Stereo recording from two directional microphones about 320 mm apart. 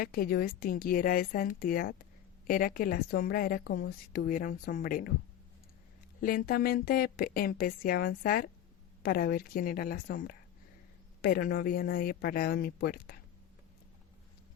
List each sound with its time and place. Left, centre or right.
0.0 s a woman's voice: left
6.1 s a woman's voice: left